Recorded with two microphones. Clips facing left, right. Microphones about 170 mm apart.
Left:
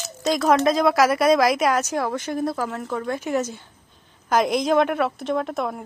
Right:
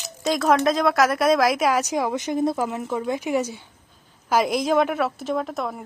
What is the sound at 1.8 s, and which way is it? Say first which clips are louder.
A woman's voice: right 1 dB; 15° right (ahead or behind).